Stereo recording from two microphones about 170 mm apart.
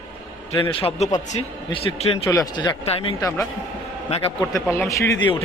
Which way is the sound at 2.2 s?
20° left (ahead or behind).